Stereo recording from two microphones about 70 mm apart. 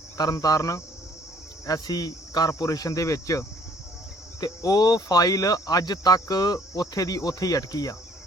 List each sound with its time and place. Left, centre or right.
0.2 s speech: left
4.4 s speech: left